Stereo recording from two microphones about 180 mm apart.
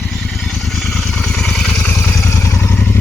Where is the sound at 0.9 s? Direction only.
5° left (ahead or behind).